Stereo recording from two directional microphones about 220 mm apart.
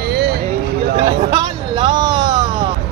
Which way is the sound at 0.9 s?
25° right (ahead or behind).